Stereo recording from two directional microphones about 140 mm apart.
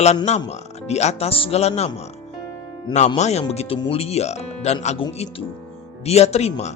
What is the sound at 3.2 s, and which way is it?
Speech, 50° left (ahead or behind).